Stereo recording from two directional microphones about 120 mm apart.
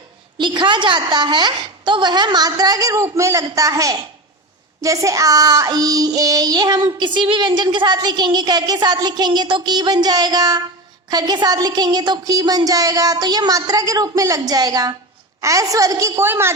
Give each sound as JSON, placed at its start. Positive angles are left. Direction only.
{"t": 0.3, "sound": "a woman's voice", "side_deg": -40}